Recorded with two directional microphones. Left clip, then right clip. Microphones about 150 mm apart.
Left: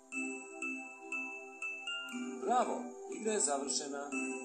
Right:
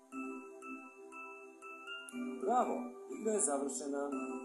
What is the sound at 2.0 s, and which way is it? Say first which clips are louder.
Music: right 1 dB; 35° left (ahead or behind).